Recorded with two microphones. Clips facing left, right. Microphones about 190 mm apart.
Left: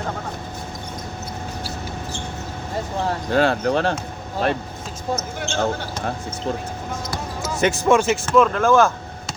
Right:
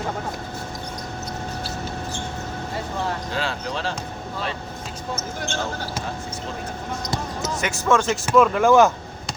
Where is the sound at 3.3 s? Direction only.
55° left (ahead or behind).